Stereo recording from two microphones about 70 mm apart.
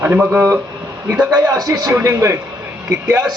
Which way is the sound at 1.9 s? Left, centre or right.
Right.